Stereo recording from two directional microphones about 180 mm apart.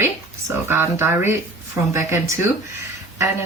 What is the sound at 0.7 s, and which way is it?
Speech, 15° right (ahead or behind).